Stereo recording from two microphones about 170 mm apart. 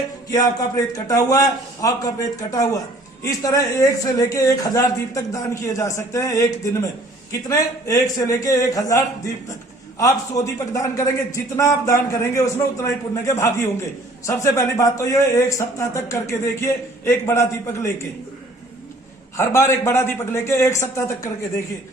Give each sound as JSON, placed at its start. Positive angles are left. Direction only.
{"t": 0.3, "sound": "a man's voice", "side_deg": 20}
{"t": 19.4, "sound": "a man's voice", "side_deg": 15}